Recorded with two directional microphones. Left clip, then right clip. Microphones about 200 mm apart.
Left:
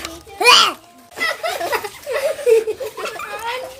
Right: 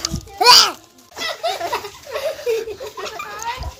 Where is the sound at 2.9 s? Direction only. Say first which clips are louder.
Left 2 dB; 30° left (ahead or behind).